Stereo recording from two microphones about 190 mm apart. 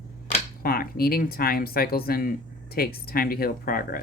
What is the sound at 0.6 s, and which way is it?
Speech, 50° left (ahead or behind).